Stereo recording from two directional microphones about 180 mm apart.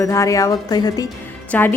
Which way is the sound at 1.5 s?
10° left (ahead or behind).